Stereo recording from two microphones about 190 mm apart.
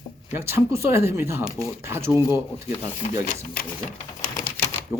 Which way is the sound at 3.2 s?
40° left (ahead or behind).